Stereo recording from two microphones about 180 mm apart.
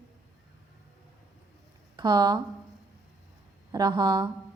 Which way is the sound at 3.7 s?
25° right (ahead or behind).